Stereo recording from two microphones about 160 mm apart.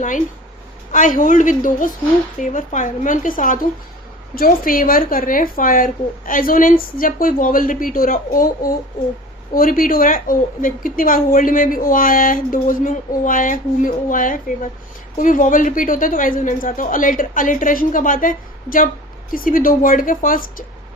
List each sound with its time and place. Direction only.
0.9 s a woman's voice: 50° left (ahead or behind)